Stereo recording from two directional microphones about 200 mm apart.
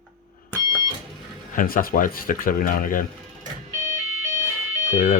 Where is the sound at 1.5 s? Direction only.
45° left (ahead or behind).